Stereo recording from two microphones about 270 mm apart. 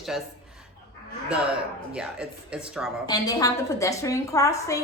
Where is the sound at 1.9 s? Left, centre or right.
Centre.